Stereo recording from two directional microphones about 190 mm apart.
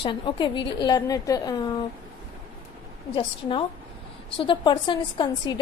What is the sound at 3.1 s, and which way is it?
A woman's voice, 25° left (ahead or behind).